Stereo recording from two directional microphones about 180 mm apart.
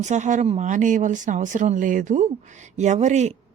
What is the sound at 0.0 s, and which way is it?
Speech, 40° right (ahead or behind).